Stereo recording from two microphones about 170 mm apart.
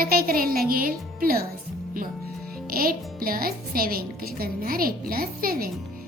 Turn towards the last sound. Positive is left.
turn(degrees=-60)  # may be behind; listen again after turning